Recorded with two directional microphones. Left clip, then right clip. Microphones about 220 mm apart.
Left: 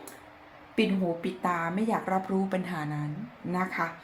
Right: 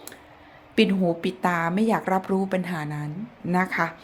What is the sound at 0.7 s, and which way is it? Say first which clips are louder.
A woman's voice: right 6 dB; 45° right (ahead or behind).